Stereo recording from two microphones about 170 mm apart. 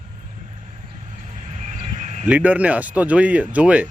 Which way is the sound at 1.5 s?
45° right (ahead or behind).